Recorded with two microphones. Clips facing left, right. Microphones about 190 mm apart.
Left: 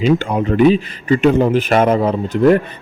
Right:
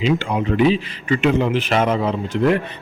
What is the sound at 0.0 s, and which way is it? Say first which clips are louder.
A man's voice: left 4 dB; 45° left (ahead or behind).